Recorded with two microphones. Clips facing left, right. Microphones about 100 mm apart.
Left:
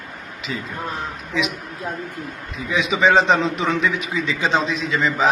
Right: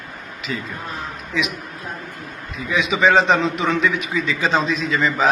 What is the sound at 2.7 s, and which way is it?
A man's voice, 30° left (ahead or behind).